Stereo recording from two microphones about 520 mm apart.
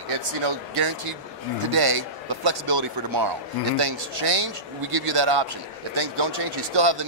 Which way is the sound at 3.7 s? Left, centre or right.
Right.